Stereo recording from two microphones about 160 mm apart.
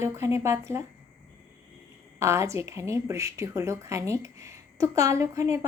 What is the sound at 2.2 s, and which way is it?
A woman's voice, 15° right (ahead or behind).